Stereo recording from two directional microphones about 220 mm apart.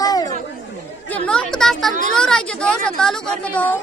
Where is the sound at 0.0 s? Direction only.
15° left (ahead or behind).